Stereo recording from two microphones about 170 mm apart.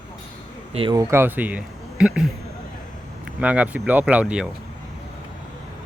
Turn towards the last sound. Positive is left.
turn(degrees=-5)  # may be behind; listen again after turning